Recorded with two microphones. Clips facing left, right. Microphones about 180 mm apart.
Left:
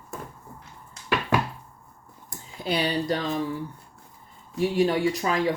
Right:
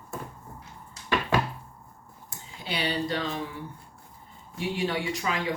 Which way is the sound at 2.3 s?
40° left (ahead or behind).